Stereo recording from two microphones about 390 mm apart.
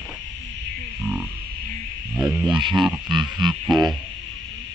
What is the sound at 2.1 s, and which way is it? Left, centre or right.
Insect, centre.